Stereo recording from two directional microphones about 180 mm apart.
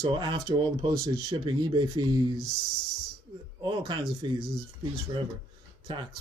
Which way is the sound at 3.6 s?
25° right (ahead or behind).